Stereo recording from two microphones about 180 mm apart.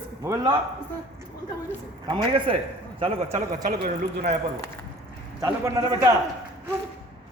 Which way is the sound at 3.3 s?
50° right (ahead or behind).